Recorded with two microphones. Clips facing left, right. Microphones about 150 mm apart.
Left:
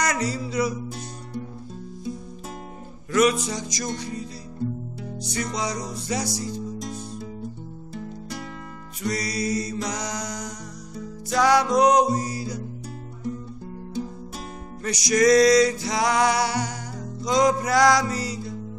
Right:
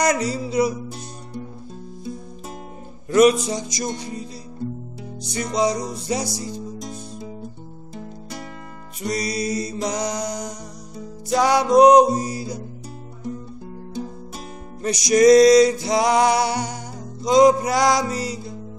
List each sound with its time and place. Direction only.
0.0 s music: 25° right (ahead or behind)
3.1 s music: 25° right (ahead or behind)
5.3 s music: 25° right (ahead or behind)
6.2 s music: 15° right (ahead or behind)
9.0 s music: 20° right (ahead or behind)
14.8 s music: 20° right (ahead or behind)